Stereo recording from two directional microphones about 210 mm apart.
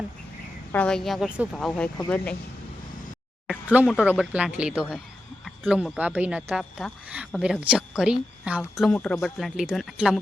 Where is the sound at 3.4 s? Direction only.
5° right (ahead or behind).